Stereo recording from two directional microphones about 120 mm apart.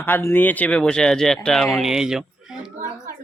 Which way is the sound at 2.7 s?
90° right.